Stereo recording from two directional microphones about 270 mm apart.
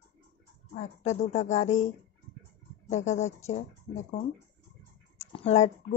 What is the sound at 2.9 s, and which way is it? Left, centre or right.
Speech, left.